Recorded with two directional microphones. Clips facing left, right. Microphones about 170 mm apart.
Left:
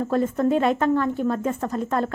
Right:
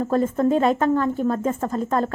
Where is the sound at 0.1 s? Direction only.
35° right (ahead or behind).